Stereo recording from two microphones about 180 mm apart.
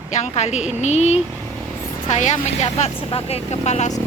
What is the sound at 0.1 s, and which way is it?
Speech, 40° left (ahead or behind).